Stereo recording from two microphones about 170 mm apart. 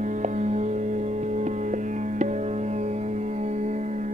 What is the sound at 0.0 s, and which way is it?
Music, 45° right (ahead or behind).